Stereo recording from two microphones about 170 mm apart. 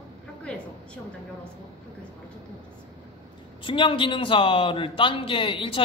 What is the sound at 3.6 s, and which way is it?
A man's voice, 30° left (ahead or behind).